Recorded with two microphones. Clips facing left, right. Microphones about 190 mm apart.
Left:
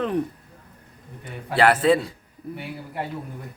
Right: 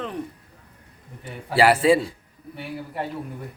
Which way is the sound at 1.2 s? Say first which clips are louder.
Right 1 dB; 10° right (ahead or behind).